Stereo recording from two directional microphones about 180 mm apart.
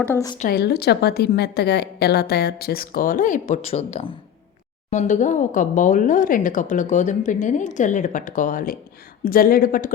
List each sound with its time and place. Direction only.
0.0 s a woman's voice: 15° left (ahead or behind)
0.3 s a woman's voice: 55° left (ahead or behind)